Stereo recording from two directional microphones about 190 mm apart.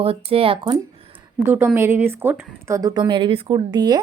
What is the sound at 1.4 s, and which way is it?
A woman's voice, 10° right (ahead or behind).